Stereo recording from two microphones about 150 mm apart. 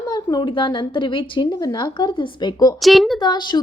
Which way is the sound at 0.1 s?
30° left (ahead or behind).